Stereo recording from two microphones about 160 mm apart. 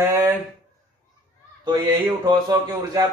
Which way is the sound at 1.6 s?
25° right (ahead or behind).